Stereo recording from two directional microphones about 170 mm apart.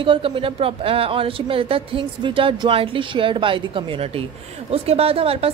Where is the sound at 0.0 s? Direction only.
30° right (ahead or behind).